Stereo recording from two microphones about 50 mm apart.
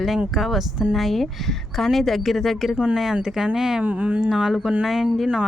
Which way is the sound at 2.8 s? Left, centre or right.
Centre.